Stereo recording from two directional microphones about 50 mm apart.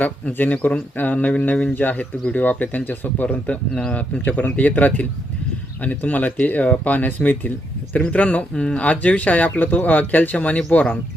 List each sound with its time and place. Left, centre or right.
0.0 s speech: left
4.3 s speech: left
10.3 s speech: left
10.7 s speech: left